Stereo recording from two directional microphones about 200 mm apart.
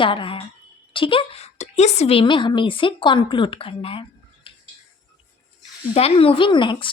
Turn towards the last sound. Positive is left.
turn(degrees=25)  # may be behind; listen again after turning